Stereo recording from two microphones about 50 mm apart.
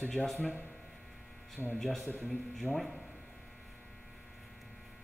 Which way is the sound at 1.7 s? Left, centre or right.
Centre.